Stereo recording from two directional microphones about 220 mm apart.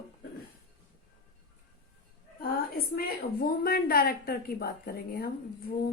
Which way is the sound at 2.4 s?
45° left (ahead or behind).